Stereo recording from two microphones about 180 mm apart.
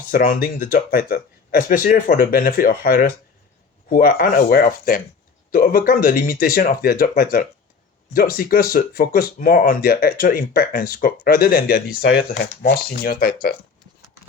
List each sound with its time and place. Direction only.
0.1 s speech: 50° left (ahead or behind)